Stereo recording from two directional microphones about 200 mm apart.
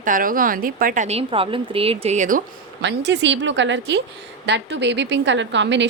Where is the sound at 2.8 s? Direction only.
60° right (ahead or behind).